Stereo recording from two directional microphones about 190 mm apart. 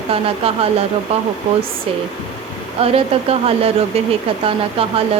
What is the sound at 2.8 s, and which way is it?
Speech, 30° right (ahead or behind).